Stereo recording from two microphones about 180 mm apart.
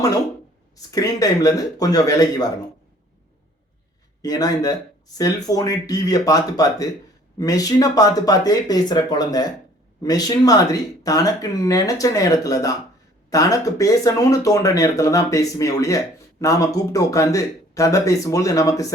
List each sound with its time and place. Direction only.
0.8 s speech: 20° left (ahead or behind)
4.2 s speech: 20° left (ahead or behind)